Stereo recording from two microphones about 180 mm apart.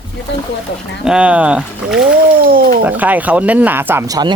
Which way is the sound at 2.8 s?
10° right (ahead or behind).